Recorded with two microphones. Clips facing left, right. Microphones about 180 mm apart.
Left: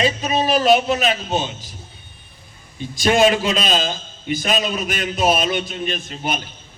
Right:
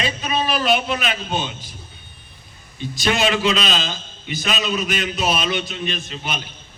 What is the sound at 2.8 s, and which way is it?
A man's voice, 45° left (ahead or behind).